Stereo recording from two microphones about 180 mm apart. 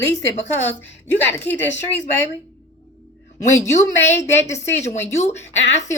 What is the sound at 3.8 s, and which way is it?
A woman's voice, 40° left (ahead or behind).